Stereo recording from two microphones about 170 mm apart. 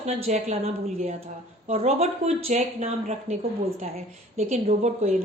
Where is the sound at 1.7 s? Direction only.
40° right (ahead or behind).